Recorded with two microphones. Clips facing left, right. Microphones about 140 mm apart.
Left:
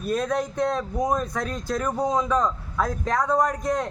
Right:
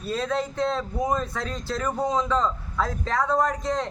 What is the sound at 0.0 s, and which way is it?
A man's voice, 15° left (ahead or behind).